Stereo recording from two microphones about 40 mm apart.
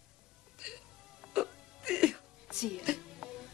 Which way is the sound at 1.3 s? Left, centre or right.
Centre.